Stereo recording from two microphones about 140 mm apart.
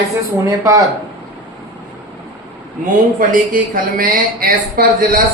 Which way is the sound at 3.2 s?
80° right.